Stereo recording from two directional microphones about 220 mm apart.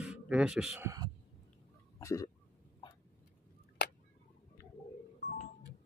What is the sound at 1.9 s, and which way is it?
Cough, 15° left (ahead or behind).